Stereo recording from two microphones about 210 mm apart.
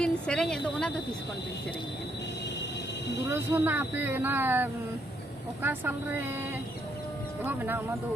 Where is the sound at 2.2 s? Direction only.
55° left (ahead or behind).